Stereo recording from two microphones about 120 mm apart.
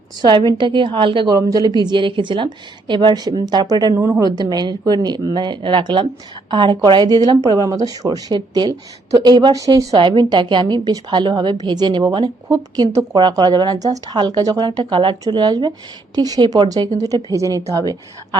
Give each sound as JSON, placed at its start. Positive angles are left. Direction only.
{"t": 0.2, "sound": "a woman's voice", "side_deg": -40}
{"t": 1.4, "sound": "a woman's voice", "side_deg": -30}
{"t": 3.9, "sound": "a woman's voice", "side_deg": -20}
{"t": 4.4, "sound": "a woman's voice", "side_deg": -35}